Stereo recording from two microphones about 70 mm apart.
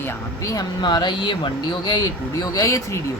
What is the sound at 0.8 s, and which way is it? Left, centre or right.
Speech, left.